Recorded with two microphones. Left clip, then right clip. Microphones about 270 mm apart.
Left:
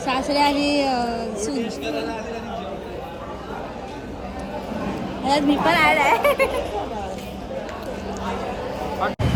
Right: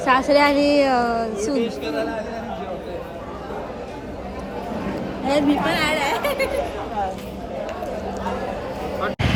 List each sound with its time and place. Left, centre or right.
0.0 s a woman's voice: centre
5.2 s a woman's voice: centre